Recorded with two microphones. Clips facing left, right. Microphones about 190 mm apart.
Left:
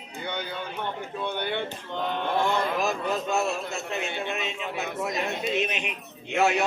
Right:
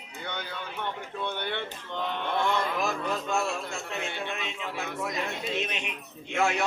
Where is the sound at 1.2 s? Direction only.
5° left (ahead or behind).